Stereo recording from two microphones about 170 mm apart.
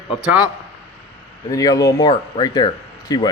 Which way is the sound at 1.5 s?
20° left (ahead or behind).